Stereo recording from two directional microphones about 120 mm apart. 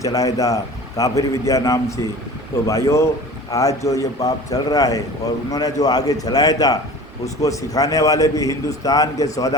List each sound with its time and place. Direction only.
0.0 s a man's voice: 30° left (ahead or behind)